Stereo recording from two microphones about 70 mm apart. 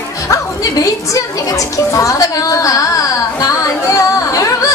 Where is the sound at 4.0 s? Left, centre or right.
Left.